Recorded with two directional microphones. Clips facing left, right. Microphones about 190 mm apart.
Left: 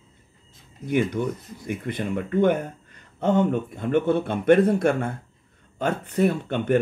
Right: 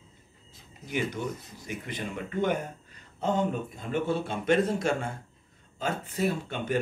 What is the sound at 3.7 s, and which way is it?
Speech, 60° left (ahead or behind).